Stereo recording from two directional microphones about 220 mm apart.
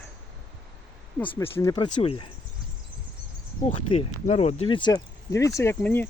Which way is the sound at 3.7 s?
30° left (ahead or behind).